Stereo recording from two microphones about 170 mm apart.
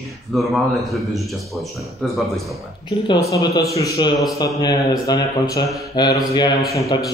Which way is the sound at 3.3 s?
20° left (ahead or behind).